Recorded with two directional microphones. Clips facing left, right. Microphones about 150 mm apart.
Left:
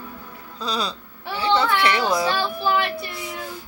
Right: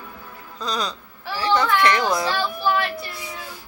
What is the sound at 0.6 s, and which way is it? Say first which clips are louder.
Speech: even; 10° left (ahead or behind).